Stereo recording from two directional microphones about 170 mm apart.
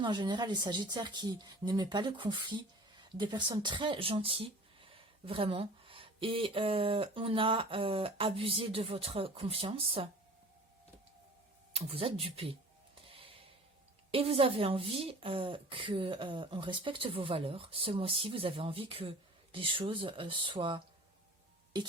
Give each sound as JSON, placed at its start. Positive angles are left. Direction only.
{"t": 0.0, "sound": "a woman's voice", "side_deg": -25}
{"t": 11.7, "sound": "a woman's voice", "side_deg": -35}
{"t": 13.1, "sound": "music", "side_deg": -30}
{"t": 14.1, "sound": "a woman's voice", "side_deg": -35}